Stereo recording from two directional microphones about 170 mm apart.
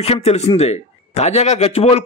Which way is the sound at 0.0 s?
35° left (ahead or behind).